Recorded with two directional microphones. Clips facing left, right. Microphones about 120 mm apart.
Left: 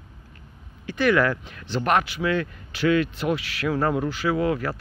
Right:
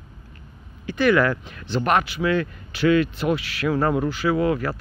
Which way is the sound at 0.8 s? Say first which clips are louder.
Right 2 dB; 10° right (ahead or behind).